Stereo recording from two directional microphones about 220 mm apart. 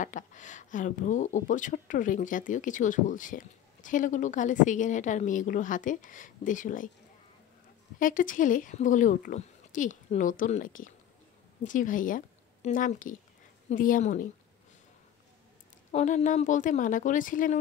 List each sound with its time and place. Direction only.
0.0 s speech: 35° left (ahead or behind)
8.0 s speech: 40° left (ahead or behind)
15.9 s speech: 30° left (ahead or behind)